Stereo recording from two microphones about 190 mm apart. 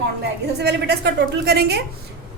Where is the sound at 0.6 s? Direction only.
60° right (ahead or behind).